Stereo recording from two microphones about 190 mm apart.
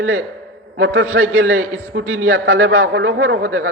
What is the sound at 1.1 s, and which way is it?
Speech, 65° right (ahead or behind).